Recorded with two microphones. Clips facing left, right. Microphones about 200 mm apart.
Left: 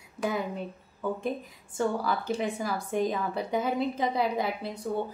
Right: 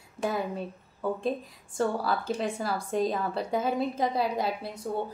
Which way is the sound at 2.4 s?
20° left (ahead or behind).